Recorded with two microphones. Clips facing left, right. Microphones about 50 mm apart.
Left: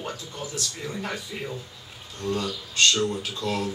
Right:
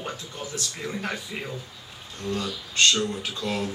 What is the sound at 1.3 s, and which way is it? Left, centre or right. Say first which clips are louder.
Speech: even; right.